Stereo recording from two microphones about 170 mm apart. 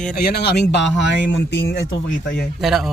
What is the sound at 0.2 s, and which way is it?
Speech, 65° left (ahead or behind).